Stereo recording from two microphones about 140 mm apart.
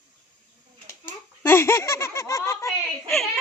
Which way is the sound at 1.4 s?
20° left (ahead or behind).